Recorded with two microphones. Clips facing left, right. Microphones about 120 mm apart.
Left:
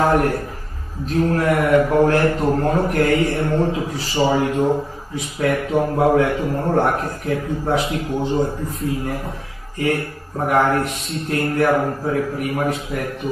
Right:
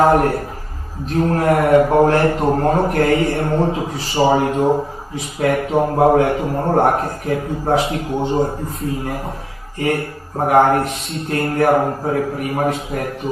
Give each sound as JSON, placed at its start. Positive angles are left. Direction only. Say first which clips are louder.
{"t": 0.0, "sound": "a man's voice", "louder": "right 3 dB", "side_deg": -35}